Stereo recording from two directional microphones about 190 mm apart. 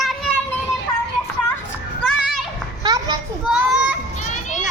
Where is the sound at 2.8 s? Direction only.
20° right (ahead or behind).